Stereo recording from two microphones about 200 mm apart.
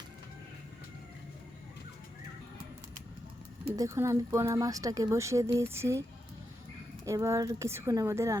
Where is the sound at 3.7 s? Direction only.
15° right (ahead or behind).